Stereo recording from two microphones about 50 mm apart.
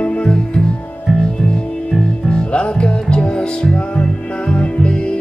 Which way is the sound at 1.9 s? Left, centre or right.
Centre.